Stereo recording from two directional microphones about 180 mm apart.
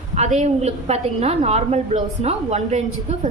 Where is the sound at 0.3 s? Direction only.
40° right (ahead or behind).